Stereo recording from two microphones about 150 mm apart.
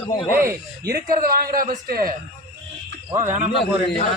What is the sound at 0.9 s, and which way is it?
Speech, 80° right.